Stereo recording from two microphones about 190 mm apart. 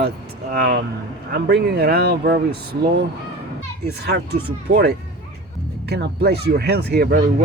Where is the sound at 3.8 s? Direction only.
60° right (ahead or behind).